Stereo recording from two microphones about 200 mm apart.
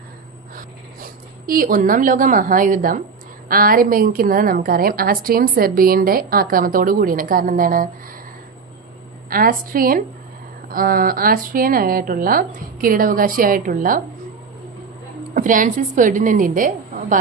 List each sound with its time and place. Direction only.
1.5 s a woman's voice: 45° right (ahead or behind)
9.3 s a woman's voice: 45° right (ahead or behind)
15.4 s a woman's voice: 40° right (ahead or behind)